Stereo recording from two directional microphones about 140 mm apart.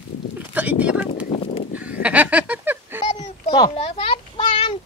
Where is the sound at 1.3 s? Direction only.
45° left (ahead or behind).